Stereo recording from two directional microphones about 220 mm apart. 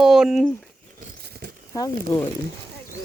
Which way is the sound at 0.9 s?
45° right (ahead or behind).